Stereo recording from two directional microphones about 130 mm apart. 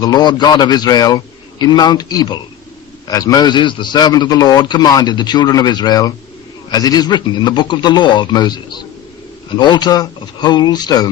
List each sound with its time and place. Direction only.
0.0 s a man's voice: 30° left (ahead or behind)